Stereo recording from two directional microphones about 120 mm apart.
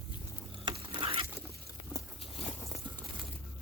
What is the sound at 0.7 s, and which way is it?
Stir, 50° right (ahead or behind).